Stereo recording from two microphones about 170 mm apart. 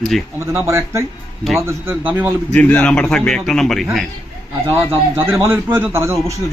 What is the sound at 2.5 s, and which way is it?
Speech, 5° left (ahead or behind).